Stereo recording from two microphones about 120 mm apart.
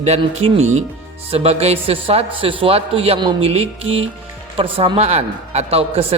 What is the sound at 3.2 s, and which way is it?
Speech, 40° right (ahead or behind).